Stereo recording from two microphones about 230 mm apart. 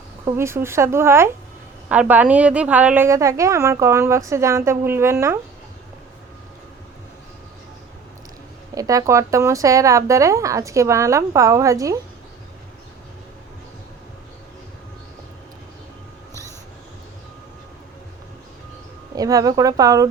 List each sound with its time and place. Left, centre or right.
0.3 s a woman's voice: centre
8.7 s a woman's voice: centre
19.1 s a woman's voice: centre